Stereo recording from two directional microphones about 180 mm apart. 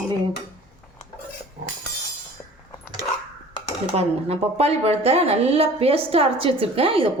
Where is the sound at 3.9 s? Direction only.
35° right (ahead or behind).